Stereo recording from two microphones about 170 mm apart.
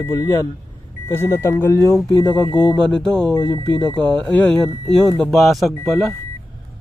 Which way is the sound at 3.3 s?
20° left (ahead or behind).